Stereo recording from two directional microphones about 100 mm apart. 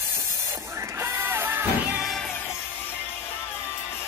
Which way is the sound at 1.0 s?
20° right (ahead or behind).